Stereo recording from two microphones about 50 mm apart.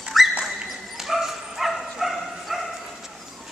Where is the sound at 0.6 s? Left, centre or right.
Centre.